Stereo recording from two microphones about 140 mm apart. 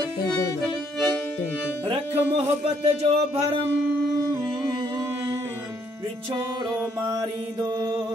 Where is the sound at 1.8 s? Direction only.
45° right (ahead or behind).